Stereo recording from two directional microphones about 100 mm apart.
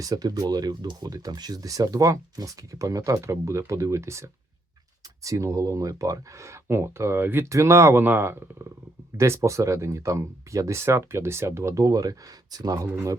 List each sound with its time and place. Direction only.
0.0 s speech: 40° right (ahead or behind)
12.9 s speech: 25° right (ahead or behind)